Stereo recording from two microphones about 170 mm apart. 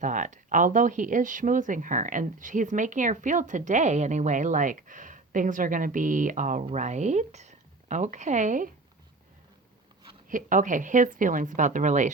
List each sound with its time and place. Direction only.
0.0 s a woman's voice: 50° right (ahead or behind)
10.2 s speech: 50° right (ahead or behind)